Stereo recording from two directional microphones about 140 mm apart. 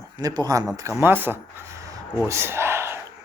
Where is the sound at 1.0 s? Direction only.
15° right (ahead or behind).